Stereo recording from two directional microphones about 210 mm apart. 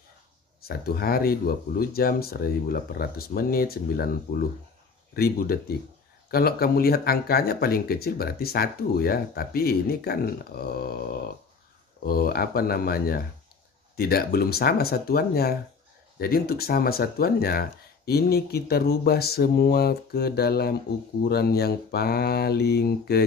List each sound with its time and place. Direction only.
0.6 s speech: 45° left (ahead or behind)